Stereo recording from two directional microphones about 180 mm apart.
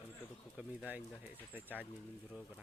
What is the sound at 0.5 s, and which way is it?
Speech, 5° right (ahead or behind).